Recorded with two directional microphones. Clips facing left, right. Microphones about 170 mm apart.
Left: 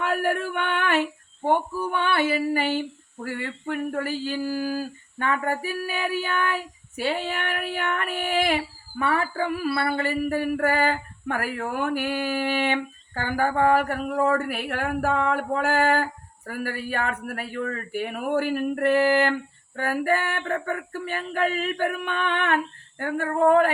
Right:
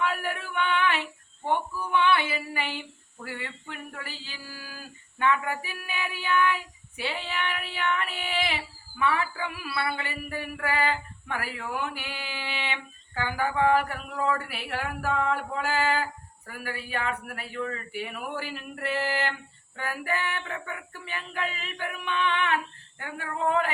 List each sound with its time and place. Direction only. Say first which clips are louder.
0.0 s female singing: left 6 dB; 45° left (ahead or behind)